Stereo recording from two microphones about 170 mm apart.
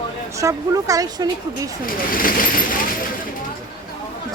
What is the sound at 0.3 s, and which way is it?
Speech, 20° right (ahead or behind).